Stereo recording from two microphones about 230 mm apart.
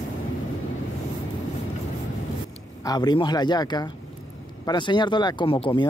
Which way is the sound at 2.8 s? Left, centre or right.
Centre.